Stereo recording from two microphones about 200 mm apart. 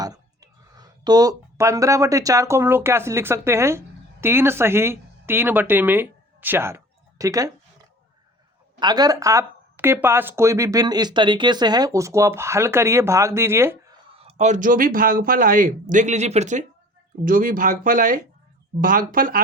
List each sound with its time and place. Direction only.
0.0 s speech: 20° right (ahead or behind)
8.8 s speech: 20° right (ahead or behind)
14.2 s speech: 30° right (ahead or behind)